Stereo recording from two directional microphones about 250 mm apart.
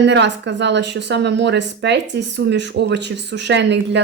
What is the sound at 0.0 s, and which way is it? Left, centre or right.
Speech, right.